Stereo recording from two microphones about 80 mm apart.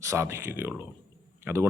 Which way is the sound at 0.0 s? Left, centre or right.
Right.